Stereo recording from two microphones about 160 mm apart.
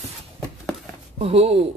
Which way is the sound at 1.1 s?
35° right (ahead or behind).